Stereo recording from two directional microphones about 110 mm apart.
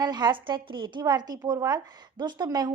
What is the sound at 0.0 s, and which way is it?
A woman's voice, 40° right (ahead or behind).